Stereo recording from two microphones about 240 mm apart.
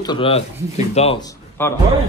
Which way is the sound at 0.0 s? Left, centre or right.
Left.